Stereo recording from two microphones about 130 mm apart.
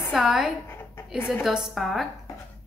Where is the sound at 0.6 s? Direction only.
20° left (ahead or behind).